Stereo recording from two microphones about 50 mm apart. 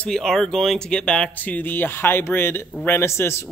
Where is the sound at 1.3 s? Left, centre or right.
Left.